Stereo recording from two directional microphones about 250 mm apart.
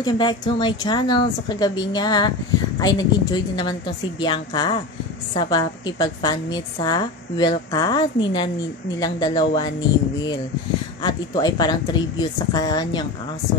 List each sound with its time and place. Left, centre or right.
0.0 s a woman's voice: centre